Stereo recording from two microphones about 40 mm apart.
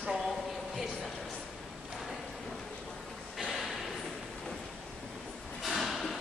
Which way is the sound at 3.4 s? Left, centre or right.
Centre.